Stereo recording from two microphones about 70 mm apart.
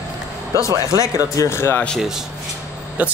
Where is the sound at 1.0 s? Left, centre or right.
Left.